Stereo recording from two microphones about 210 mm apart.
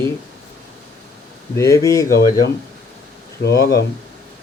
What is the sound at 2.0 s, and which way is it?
Speech, 40° left (ahead or behind).